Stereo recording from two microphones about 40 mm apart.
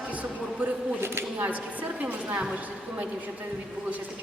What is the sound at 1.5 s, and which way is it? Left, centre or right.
Speech, right.